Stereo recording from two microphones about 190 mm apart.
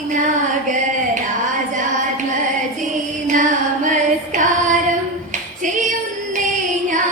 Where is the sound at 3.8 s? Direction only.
40° right (ahead or behind).